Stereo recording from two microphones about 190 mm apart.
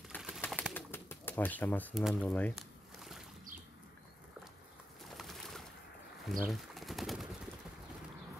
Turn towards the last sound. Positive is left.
turn(degrees=0)  # may be behind; listen again after turning